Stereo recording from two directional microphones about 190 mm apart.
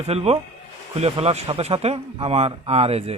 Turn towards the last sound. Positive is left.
turn(degrees=-30)  # may be behind; listen again after turning